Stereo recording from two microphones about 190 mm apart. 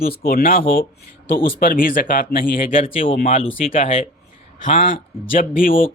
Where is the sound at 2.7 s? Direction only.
30° left (ahead or behind).